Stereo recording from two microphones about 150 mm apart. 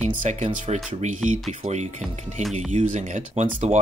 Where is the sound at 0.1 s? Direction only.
55° right (ahead or behind).